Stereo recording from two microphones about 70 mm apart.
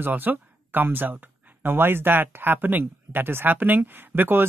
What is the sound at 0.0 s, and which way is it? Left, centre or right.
Speech, right.